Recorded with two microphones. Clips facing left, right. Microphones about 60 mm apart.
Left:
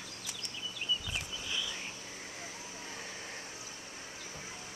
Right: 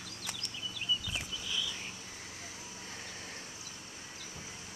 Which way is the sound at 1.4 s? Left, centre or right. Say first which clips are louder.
Right 1 dB; left.